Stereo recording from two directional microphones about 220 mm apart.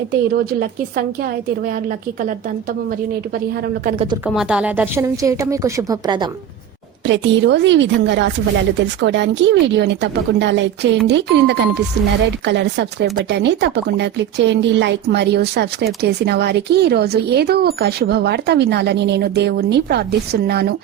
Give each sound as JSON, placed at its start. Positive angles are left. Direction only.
{"t": 0.3, "sound": "speech", "side_deg": -40}
{"t": 3.8, "sound": "speech", "side_deg": -25}
{"t": 4.4, "sound": "a woman's voice", "side_deg": -5}
{"t": 7.1, "sound": "speech", "side_deg": -55}